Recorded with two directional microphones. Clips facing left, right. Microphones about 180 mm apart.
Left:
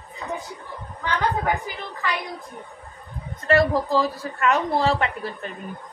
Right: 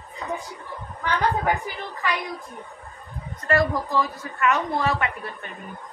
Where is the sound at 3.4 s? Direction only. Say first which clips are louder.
Left 3 dB; 25° left (ahead or behind).